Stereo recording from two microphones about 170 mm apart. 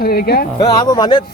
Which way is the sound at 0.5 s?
25° left (ahead or behind).